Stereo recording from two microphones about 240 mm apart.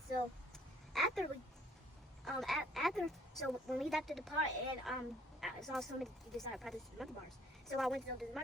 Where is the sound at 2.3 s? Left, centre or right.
Centre.